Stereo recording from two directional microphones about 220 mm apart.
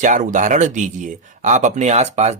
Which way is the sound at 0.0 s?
35° right (ahead or behind).